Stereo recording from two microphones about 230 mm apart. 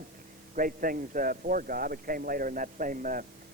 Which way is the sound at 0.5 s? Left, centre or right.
Right.